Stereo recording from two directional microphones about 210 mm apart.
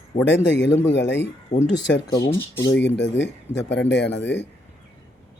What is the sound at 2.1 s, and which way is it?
Speech, 15° left (ahead or behind).